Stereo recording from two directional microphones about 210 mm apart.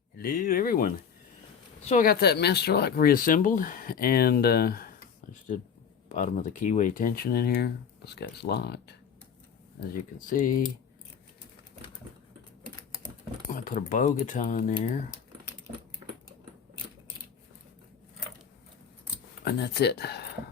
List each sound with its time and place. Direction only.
0.2 s speech: 45° left (ahead or behind)
1.8 s speech: 30° left (ahead or behind)
2.0 s speech: 50° left (ahead or behind)
9.9 s speech: 40° left (ahead or behind)
13.5 s speech: 40° left (ahead or behind)
19.5 s speech: 50° left (ahead or behind)